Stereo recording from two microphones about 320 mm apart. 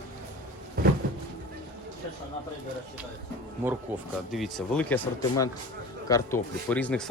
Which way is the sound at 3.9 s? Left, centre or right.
Centre.